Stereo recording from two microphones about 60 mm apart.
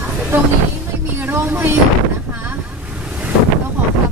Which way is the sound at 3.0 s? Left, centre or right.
Centre.